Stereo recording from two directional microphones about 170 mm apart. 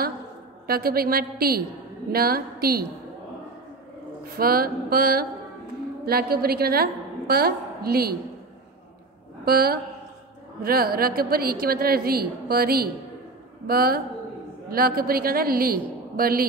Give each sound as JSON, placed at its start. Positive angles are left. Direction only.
{"t": 0.7, "sound": "a woman's voice", "side_deg": -60}
{"t": 4.4, "sound": "a woman's voice", "side_deg": -60}
{"t": 9.4, "sound": "a woman's voice", "side_deg": -65}